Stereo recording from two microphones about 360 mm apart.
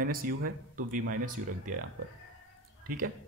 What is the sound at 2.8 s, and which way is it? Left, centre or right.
Speech, right.